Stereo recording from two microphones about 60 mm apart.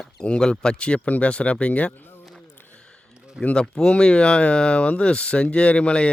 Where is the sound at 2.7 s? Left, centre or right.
Centre.